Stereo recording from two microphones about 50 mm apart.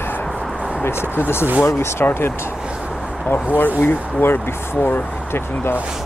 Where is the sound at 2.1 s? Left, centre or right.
Left.